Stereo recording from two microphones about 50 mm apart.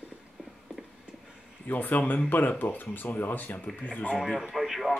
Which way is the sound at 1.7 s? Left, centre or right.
Left.